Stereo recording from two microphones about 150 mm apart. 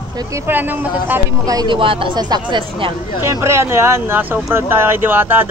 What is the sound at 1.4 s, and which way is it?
Speech, 30° right (ahead or behind).